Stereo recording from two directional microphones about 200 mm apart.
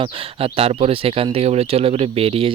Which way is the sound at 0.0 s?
25° right (ahead or behind).